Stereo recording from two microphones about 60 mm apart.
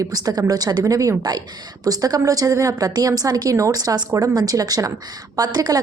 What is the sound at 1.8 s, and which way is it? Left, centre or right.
A woman's voice, right.